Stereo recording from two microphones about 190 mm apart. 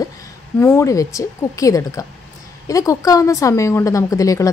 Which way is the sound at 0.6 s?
15° left (ahead or behind).